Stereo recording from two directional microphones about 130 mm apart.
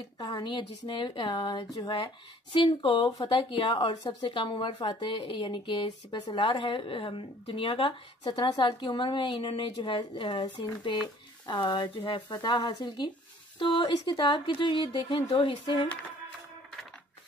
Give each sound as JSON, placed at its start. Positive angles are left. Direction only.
{"t": 0.2, "sound": "a woman's voice", "side_deg": 35}